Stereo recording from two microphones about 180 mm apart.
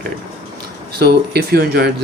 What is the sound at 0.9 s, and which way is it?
Speech, 60° right (ahead or behind).